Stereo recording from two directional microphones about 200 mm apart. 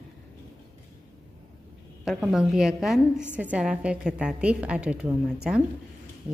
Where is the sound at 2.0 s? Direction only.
Centre (ahead or behind).